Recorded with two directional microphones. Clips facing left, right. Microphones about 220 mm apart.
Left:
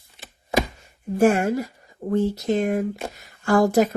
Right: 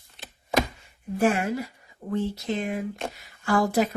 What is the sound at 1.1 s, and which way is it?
Speech, 45° left (ahead or behind).